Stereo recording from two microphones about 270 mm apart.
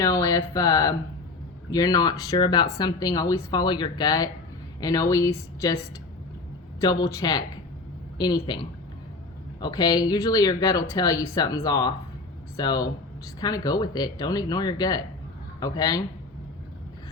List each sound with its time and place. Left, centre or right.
0.0 s a woman's voice: centre
6.8 s speech: centre